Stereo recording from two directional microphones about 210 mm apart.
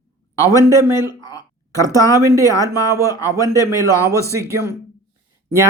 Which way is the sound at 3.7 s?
15° right (ahead or behind).